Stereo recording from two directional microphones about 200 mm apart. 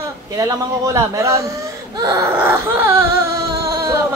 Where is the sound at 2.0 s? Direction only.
15° right (ahead or behind).